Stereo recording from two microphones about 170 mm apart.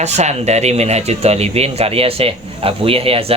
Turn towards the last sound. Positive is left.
turn(degrees=-35)  # may be behind; listen again after turning